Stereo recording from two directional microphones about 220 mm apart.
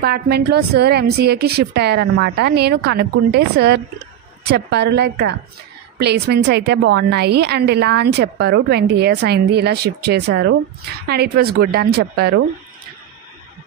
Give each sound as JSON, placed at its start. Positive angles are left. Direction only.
{"t": 0.0, "sound": "a woman's voice", "side_deg": -45}